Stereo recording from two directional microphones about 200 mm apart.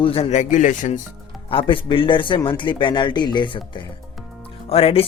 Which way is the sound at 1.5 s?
25° left (ahead or behind).